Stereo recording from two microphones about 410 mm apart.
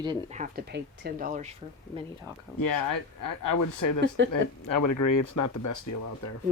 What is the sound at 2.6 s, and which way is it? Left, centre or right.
Speech, left.